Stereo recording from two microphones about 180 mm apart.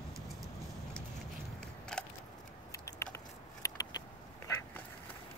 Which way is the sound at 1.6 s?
5° left (ahead or behind).